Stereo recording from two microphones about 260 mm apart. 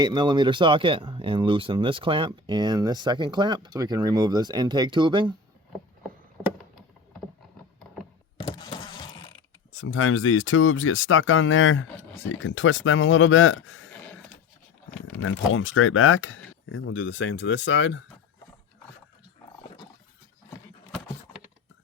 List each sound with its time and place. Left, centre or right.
0.0 s speech: centre
8.4 s power windows: centre
9.8 s speech: left
15.2 s speech: left